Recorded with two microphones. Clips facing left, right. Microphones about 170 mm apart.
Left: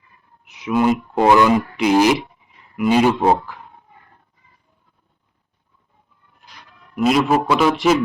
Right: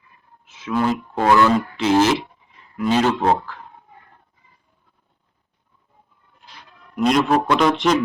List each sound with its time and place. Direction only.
0.4 s a sound: 15° left (ahead or behind)
1.1 s speech: 15° left (ahead or behind)
6.9 s a man's voice: 5° left (ahead or behind)